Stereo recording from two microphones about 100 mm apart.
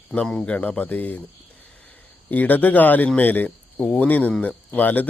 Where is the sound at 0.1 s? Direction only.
5° left (ahead or behind).